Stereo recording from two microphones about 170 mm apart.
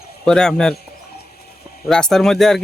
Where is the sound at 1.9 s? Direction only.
5° left (ahead or behind).